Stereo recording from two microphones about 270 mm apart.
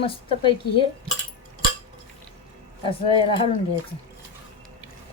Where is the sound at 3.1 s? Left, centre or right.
Centre.